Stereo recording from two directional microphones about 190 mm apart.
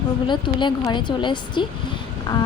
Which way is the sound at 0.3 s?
25° left (ahead or behind).